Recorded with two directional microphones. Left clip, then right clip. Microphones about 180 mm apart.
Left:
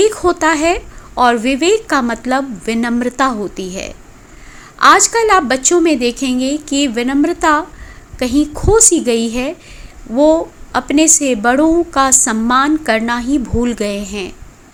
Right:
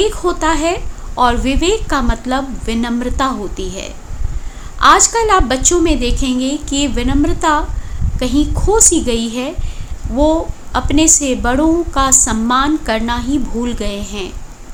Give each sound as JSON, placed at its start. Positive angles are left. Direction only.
{"t": 0.0, "sound": "a woman's voice", "side_deg": 30}